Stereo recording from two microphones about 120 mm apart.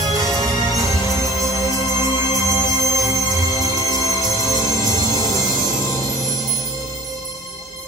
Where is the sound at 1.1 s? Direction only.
30° left (ahead or behind).